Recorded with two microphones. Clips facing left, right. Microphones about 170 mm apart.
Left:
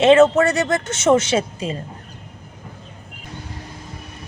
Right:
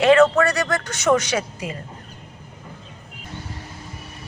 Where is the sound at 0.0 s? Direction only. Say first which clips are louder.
Left 2 dB; 25° left (ahead or behind).